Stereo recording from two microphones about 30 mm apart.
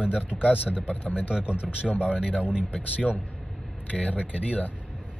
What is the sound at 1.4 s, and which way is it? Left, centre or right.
Speech, right.